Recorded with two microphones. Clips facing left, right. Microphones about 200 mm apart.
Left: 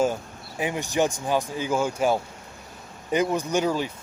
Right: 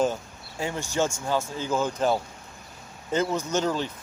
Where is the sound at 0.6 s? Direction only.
15° left (ahead or behind).